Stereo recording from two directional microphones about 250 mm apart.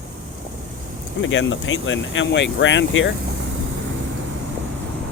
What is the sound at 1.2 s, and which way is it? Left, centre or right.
Speech, left.